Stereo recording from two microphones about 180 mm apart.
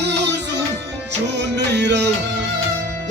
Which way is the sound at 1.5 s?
70° right (ahead or behind).